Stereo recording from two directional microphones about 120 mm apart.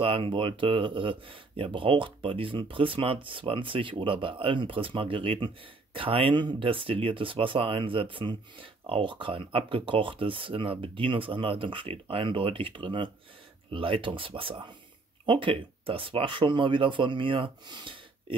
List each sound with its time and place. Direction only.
0.0 s speech: 45° right (ahead or behind)